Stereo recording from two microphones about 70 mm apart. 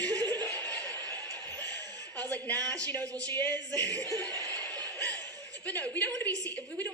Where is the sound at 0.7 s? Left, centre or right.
Right.